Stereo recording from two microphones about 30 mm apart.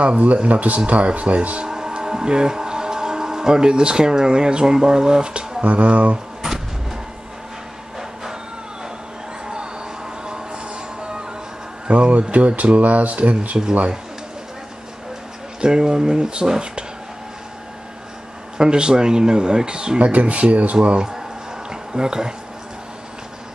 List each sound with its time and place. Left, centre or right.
0.0 s speech: right
1.7 s speech: right
5.6 s speech: right
10.2 s music: right
12.1 s speech: right
15.6 s speech: right
18.6 s speech: right
20.0 s speech: right
21.6 s a sound: right